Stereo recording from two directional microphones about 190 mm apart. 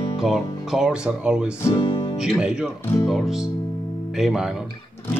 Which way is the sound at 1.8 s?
25° left (ahead or behind).